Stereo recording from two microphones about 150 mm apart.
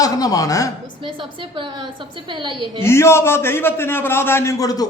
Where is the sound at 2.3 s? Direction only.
30° right (ahead or behind).